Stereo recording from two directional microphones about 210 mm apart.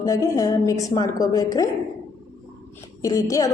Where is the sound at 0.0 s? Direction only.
15° left (ahead or behind).